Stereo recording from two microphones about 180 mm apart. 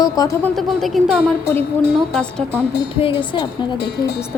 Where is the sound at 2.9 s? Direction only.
30° left (ahead or behind).